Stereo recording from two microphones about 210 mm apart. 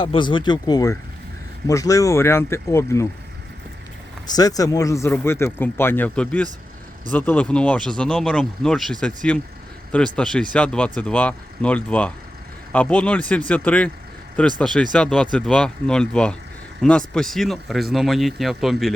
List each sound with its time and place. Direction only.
0.0 s speech: 25° left (ahead or behind)
4.4 s speech: 15° left (ahead or behind); by 18.9 s centre (ahead or behind)